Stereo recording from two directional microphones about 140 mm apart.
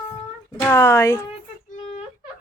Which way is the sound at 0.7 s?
20° left (ahead or behind).